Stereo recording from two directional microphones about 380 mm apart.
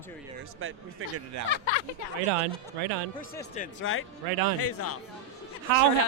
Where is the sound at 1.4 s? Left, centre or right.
Left.